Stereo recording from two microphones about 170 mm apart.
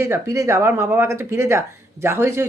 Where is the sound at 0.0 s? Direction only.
15° right (ahead or behind).